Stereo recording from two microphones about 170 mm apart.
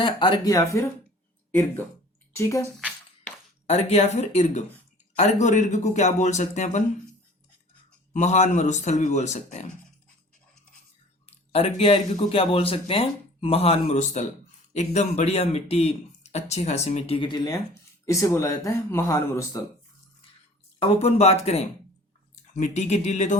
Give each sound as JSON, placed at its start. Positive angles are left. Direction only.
{"t": 0.0, "sound": "speech", "side_deg": 25}
{"t": 2.3, "sound": "speech", "side_deg": 15}
{"t": 3.7, "sound": "speech", "side_deg": 40}
{"t": 8.1, "sound": "speech", "side_deg": 45}
{"t": 11.3, "sound": "speech", "side_deg": 35}
{"t": 20.7, "sound": "speech", "side_deg": 35}